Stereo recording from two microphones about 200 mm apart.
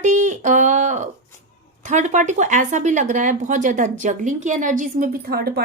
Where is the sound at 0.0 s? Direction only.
40° right (ahead or behind).